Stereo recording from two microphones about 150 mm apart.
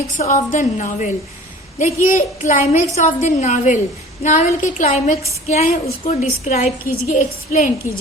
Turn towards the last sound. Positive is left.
turn(degrees=60)  # may be behind; listen again after turning